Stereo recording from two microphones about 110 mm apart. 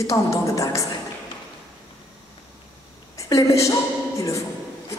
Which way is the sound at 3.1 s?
30° left (ahead or behind).